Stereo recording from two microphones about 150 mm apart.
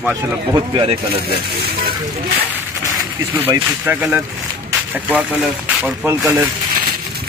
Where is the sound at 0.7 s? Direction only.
35° right (ahead or behind).